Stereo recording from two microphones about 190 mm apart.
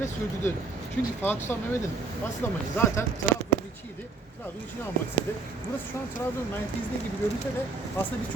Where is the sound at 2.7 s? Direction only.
15° left (ahead or behind).